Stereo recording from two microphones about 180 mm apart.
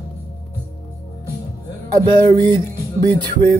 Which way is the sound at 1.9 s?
20° right (ahead or behind).